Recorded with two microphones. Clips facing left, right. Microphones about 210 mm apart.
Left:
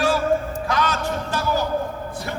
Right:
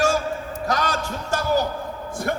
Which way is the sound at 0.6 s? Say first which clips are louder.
Right 1 dB; 40° right (ahead or behind).